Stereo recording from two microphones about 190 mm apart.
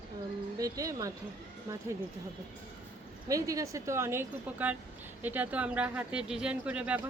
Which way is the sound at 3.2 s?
15° right (ahead or behind).